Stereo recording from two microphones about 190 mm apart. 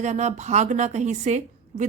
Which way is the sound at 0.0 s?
35° right (ahead or behind).